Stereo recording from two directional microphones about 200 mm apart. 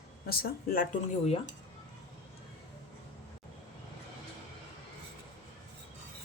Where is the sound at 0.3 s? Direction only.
45° left (ahead or behind).